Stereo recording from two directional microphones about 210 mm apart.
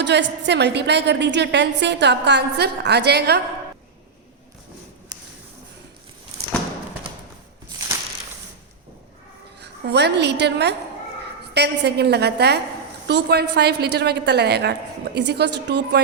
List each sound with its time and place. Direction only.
0.0 s a woman's voice: 55° right (ahead or behind)
9.6 s a woman's voice: 55° right (ahead or behind)